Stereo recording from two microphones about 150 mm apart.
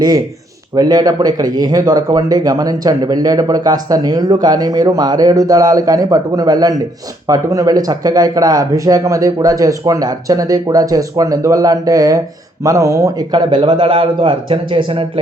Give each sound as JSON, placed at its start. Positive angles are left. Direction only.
{"t": 0.8, "sound": "a man's voice", "side_deg": -25}